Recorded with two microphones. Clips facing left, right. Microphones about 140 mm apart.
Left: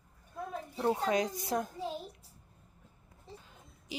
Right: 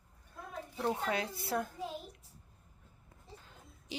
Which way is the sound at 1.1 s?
15° left (ahead or behind).